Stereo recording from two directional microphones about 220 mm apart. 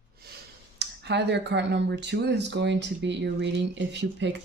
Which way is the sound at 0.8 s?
50° right (ahead or behind).